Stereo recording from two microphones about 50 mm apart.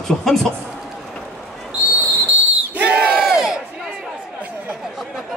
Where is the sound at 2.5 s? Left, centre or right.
Right.